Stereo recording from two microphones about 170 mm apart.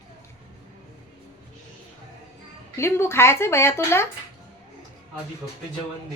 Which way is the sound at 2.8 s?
15° left (ahead or behind).